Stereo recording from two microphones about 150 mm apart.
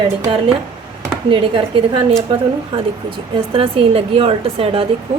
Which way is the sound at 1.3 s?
35° right (ahead or behind).